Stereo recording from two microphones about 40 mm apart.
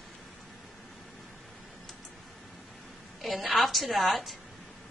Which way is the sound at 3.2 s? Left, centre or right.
Centre.